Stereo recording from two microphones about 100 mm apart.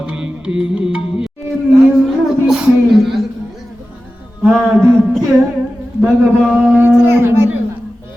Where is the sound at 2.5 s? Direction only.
5° right (ahead or behind).